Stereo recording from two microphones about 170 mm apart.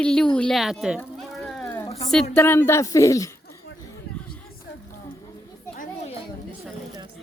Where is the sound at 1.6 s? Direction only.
15° left (ahead or behind).